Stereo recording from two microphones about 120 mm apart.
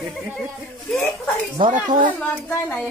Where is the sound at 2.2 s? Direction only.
15° left (ahead or behind).